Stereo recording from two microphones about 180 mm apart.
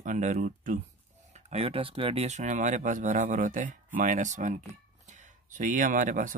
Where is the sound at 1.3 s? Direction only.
35° right (ahead or behind).